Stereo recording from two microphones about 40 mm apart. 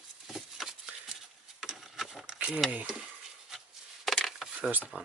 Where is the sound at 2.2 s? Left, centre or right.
Right.